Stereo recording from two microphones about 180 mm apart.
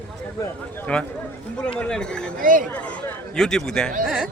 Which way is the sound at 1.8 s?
5° left (ahead or behind).